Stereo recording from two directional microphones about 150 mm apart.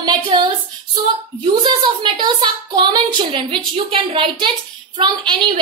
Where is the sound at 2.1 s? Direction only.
30° right (ahead or behind).